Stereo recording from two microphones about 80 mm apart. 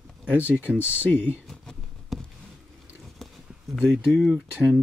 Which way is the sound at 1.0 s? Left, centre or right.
Left.